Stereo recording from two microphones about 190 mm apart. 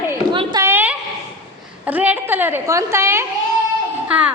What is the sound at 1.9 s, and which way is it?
A woman's voice, 10° right (ahead or behind).